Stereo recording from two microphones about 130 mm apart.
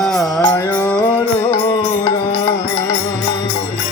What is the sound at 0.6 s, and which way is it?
Music, 15° left (ahead or behind).